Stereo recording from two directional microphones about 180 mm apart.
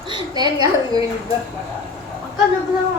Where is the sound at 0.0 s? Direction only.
25° right (ahead or behind).